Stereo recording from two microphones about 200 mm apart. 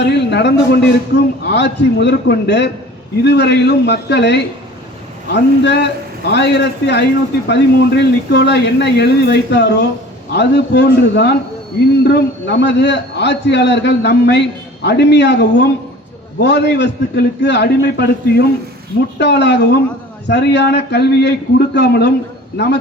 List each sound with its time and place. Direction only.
0.0 s a man's voice: 60° left (ahead or behind)